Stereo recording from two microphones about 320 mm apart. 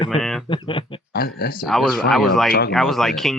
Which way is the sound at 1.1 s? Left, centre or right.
Left.